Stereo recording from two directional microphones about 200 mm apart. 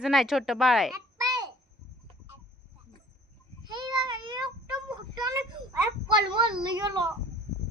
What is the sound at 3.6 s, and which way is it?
Child singing, 20° right (ahead or behind).